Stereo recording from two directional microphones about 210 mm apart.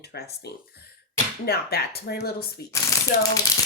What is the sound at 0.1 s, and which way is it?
Speech, 50° left (ahead or behind).